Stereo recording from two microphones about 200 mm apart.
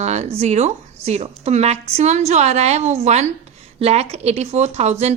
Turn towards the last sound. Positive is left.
turn(degrees=-35)  # may be behind; listen again after turning